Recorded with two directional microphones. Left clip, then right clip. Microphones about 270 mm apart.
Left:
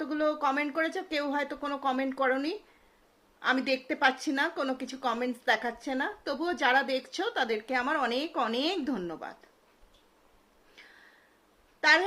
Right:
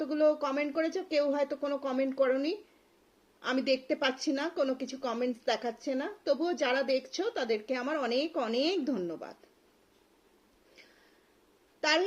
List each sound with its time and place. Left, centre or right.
0.0 s a woman's voice: centre
11.8 s a woman's voice: centre